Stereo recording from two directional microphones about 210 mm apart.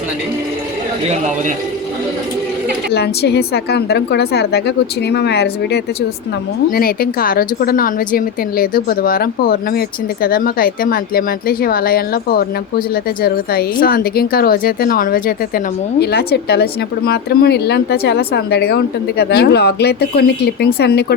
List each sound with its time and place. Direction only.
2.9 s a woman's voice: 50° left (ahead or behind)